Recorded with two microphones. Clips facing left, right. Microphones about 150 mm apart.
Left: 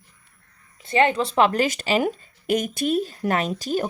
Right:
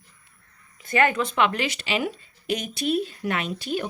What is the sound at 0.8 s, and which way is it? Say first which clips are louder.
Speech: left 2 dB; 30° left (ahead or behind).